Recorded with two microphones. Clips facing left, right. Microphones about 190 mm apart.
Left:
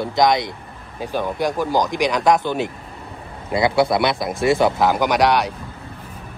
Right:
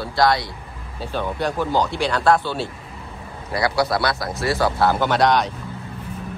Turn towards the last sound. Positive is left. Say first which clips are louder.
# left 1 dB
turn(degrees=10)  # may be behind; listen again after turning